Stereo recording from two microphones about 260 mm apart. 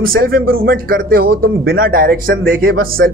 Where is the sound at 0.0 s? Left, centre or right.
Right.